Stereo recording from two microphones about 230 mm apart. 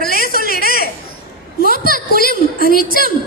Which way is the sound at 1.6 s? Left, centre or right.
Left.